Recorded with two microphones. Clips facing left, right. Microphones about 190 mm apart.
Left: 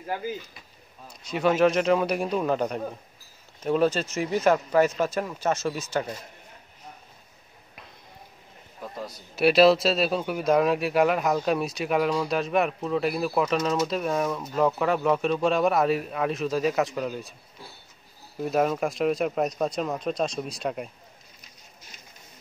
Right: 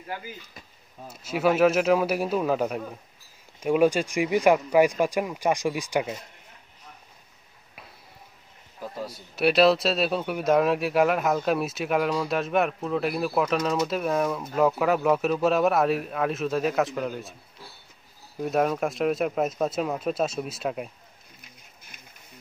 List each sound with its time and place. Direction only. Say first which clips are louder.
1.1 s a man's voice: right 1 dB; 5° right (ahead or behind)
8.8 s a man's voice: right 2 dB; 5° right (ahead or behind)
18.4 s a man's voice: even; centre (ahead or behind)
21.9 s a sound: even; 55° right (ahead or behind)